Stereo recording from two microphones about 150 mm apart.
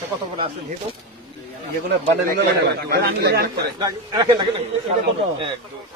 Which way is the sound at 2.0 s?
85° right.